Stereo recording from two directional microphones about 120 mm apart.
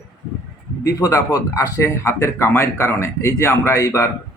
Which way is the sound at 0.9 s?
30° left (ahead or behind).